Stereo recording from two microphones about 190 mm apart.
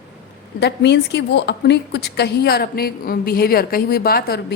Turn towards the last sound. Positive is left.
turn(degrees=55)  # may be behind; listen again after turning